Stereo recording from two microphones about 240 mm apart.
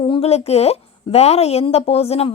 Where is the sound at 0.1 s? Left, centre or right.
Left.